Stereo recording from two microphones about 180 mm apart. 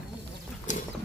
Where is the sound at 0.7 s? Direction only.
45° left (ahead or behind).